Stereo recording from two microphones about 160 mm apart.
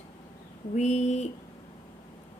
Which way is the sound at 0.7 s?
45° left (ahead or behind).